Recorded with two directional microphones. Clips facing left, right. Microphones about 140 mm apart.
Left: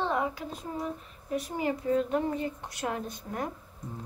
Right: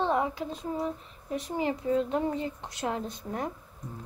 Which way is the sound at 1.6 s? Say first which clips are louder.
Right 1 dB; 20° right (ahead or behind).